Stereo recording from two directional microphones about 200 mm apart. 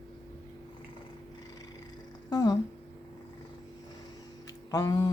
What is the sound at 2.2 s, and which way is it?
Speech, 20° left (ahead or behind).